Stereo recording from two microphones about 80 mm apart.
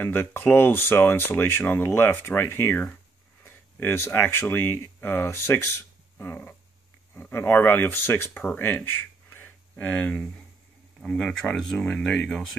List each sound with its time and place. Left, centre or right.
0.0 s speech: left
6.1 s a sound: left
7.2 s speech: left; by 12.4 s centre